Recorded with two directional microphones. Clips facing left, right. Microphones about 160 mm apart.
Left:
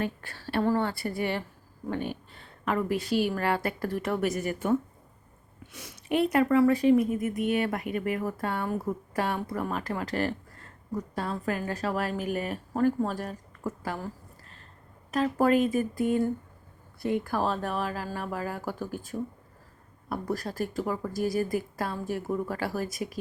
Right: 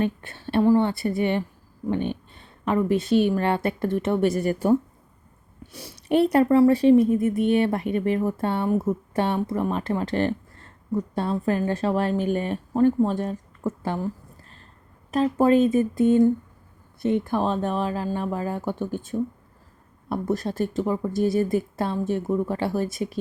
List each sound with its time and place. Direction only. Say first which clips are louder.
0.0 s speech: right 6 dB; 20° right (ahead or behind)
15.1 s speech: right 5 dB; 25° right (ahead or behind)